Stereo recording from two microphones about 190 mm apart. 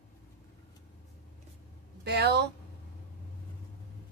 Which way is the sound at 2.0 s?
60° right (ahead or behind).